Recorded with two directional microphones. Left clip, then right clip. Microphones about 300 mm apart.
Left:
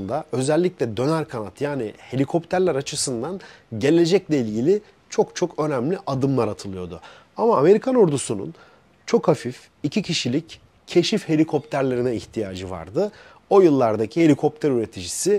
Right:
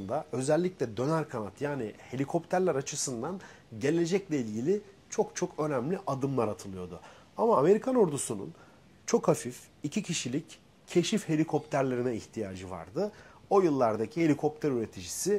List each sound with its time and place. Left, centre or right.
0.0 s speech: left
9.0 s speech: left